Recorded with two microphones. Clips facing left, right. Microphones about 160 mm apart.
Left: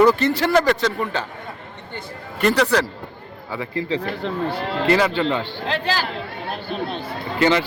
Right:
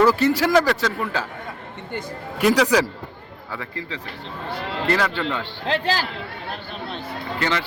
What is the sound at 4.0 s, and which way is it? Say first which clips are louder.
Speech: left 10 dB; 65° left (ahead or behind).